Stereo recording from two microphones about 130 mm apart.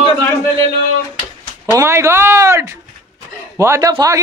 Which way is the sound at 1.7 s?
20° right (ahead or behind).